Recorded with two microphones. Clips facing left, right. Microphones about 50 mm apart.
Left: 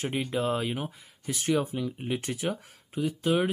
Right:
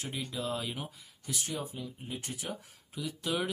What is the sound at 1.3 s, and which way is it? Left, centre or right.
Speech, left.